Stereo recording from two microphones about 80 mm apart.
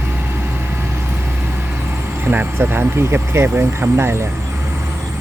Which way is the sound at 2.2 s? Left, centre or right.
Right.